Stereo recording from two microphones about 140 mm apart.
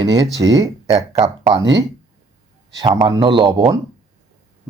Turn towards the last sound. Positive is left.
turn(degrees=-30)  # may be behind; listen again after turning